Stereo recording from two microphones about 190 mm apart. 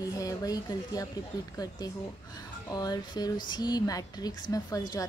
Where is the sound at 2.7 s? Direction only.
20° left (ahead or behind).